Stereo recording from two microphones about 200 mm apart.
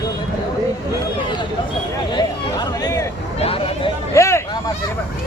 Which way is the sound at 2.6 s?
20° left (ahead or behind).